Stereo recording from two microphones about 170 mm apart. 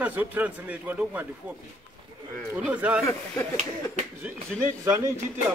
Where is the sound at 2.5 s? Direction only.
10° right (ahead or behind).